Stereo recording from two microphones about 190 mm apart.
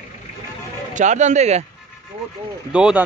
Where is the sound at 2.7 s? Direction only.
5° right (ahead or behind).